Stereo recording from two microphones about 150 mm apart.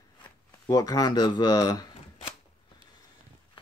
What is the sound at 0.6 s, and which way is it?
Speech, 25° left (ahead or behind).